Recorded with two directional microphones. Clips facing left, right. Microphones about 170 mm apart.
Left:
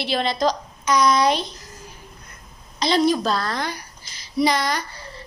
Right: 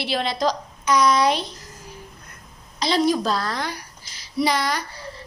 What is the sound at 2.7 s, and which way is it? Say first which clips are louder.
A woman's voice: left 1 dB; 5° right (ahead or behind).